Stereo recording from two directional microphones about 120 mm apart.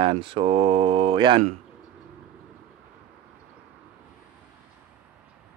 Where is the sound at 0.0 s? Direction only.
45° right (ahead or behind).